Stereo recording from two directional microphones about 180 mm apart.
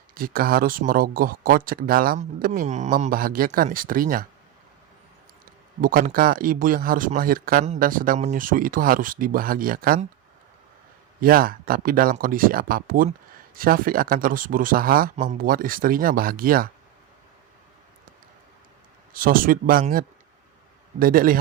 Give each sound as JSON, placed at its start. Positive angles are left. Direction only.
{"t": 0.1, "sound": "speech", "side_deg": -55}
{"t": 5.8, "sound": "speech", "side_deg": -50}
{"t": 11.2, "sound": "speech", "side_deg": -55}
{"t": 19.1, "sound": "speech", "side_deg": -50}
{"t": 21.0, "sound": "speech", "side_deg": -50}